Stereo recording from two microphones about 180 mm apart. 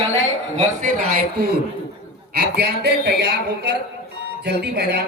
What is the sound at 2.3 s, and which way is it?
A woman's voice, 60° right (ahead or behind).